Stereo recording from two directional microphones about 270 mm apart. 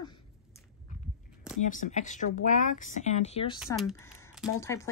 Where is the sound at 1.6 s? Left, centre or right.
Left.